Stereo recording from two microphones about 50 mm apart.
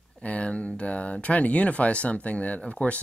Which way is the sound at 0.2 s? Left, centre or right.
Left.